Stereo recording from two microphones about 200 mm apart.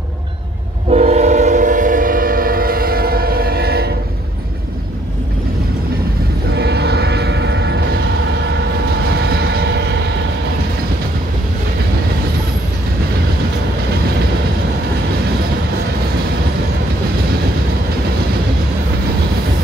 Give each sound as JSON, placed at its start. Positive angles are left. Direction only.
{"t": 0.8, "sound": "train", "side_deg": -35}
{"t": 6.5, "sound": "vehicle", "side_deg": -55}
{"t": 9.2, "sound": "vehicle", "side_deg": -55}